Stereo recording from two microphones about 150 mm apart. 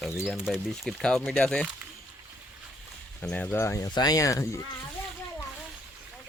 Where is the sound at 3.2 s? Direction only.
10° left (ahead or behind).